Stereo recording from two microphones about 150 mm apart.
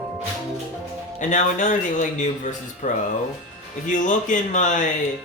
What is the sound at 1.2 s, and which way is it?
Speech, 55° left (ahead or behind).